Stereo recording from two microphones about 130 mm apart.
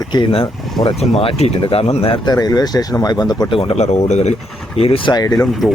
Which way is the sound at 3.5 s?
50° left (ahead or behind).